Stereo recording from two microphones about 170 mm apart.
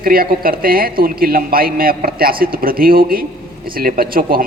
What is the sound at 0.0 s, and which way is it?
A woman's voice, 60° right (ahead or behind).